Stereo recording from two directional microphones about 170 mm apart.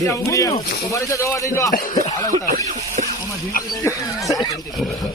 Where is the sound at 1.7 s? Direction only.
55° left (ahead or behind).